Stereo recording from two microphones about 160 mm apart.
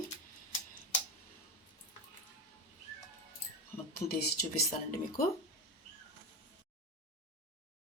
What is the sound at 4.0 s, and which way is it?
Speech, 85° left.